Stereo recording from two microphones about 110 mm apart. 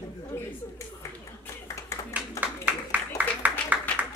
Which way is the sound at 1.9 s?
25° left (ahead or behind).